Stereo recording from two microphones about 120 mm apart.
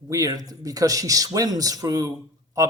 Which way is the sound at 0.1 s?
30° right (ahead or behind).